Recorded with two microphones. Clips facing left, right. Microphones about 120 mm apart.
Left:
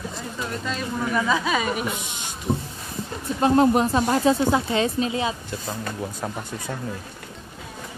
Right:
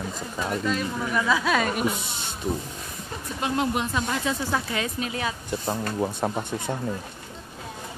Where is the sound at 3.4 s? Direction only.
40° left (ahead or behind); by 5.3 s 20° left (ahead or behind).